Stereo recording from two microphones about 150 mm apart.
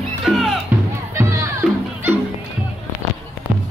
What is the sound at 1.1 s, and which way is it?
Music, 20° right (ahead or behind).